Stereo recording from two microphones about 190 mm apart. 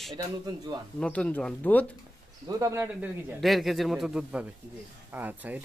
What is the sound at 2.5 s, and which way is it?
Speech, 15° right (ahead or behind).